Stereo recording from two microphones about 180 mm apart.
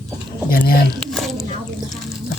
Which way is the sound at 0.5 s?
60° left (ahead or behind).